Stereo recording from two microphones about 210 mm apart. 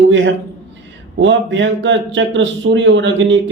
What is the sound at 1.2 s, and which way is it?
A man's voice, 60° right (ahead or behind).